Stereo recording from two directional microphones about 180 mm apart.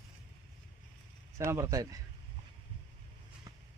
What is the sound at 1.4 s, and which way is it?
Speech, 15° right (ahead or behind).